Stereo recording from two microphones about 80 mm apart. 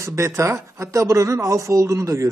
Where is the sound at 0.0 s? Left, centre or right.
Right.